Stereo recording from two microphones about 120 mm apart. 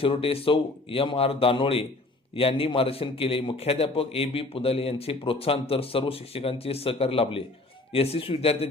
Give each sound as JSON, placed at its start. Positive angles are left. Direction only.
{"t": 0.0, "sound": "a man's voice", "side_deg": 50}